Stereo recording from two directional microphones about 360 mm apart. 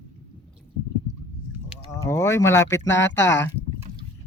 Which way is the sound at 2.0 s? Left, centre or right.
Centre.